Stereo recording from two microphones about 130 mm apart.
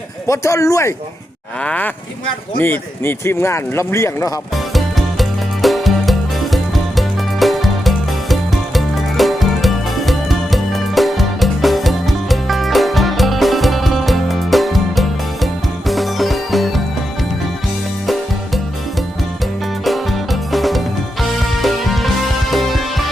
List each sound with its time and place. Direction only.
0.3 s speech: 25° left (ahead or behind)
1.6 s speech: 10° left (ahead or behind)
4.5 s music: centre (ahead or behind)
18.0 s music: centre (ahead or behind)
19.8 s music: centre (ahead or behind)